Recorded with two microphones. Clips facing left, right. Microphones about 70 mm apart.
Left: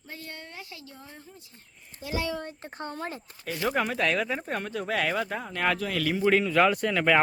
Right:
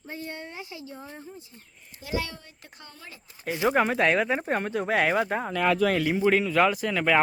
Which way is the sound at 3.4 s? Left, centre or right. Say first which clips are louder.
Right 4 dB; centre.